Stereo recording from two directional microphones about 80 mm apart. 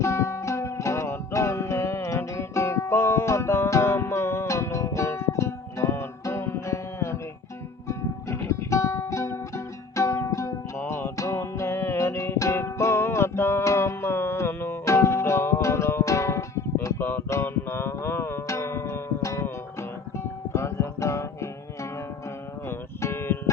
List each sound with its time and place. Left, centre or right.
0.0 s music: left
23.0 s music: left